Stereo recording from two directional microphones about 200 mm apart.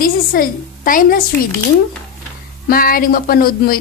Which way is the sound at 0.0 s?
45° left (ahead or behind).